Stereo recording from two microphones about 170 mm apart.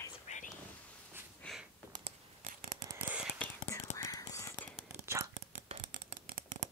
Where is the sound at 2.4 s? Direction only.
50° right (ahead or behind).